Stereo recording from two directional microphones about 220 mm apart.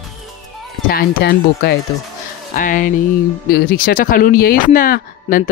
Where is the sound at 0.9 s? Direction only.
40° left (ahead or behind).